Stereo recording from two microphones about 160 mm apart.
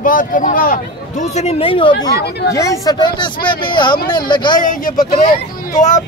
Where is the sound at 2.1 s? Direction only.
90° left.